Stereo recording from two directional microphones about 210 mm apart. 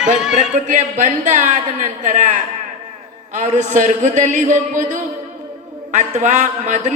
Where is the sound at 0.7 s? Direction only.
35° right (ahead or behind).